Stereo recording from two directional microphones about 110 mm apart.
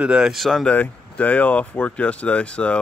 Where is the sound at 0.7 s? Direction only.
15° left (ahead or behind).